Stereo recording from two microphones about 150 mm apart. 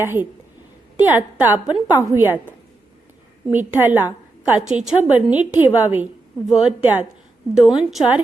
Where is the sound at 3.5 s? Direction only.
10° right (ahead or behind).